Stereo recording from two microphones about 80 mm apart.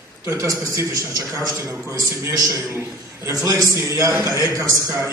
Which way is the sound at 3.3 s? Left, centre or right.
Right.